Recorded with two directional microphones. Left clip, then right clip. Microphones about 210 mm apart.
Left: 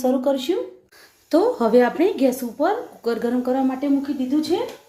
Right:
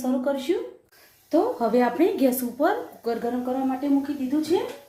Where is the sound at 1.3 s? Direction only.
40° left (ahead or behind).